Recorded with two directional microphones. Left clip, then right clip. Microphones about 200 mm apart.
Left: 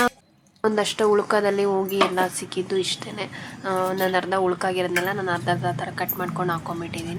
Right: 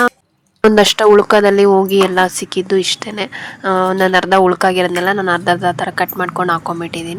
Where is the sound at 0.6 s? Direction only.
45° right (ahead or behind).